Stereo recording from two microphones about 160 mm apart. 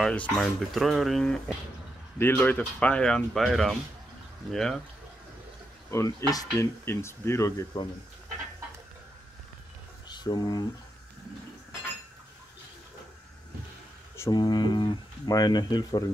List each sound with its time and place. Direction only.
0.0 s speech: 5° left (ahead or behind)
2.1 s speech: 15° left (ahead or behind)
5.9 s speech: 20° left (ahead or behind)
10.0 s speech: 25° left (ahead or behind)
14.1 s speech: 20° left (ahead or behind)